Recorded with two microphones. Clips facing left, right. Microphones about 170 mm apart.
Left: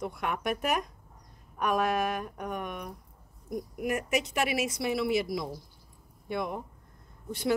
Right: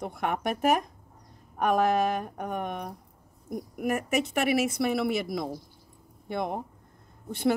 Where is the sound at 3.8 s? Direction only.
55° right (ahead or behind).